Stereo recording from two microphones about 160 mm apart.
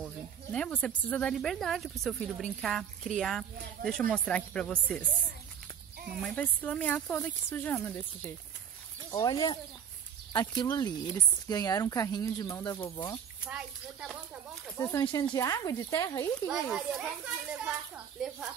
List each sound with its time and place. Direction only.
0.0 s speech: 5° left (ahead or behind)
6.2 s speech: 10° left (ahead or behind)
9.1 s speech: 25° left (ahead or behind)
13.4 s speech: 5° right (ahead or behind)
14.8 s speech: 15° left (ahead or behind)
16.4 s speech: centre (ahead or behind)